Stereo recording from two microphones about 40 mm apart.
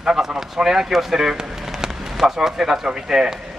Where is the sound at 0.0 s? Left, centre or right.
Centre.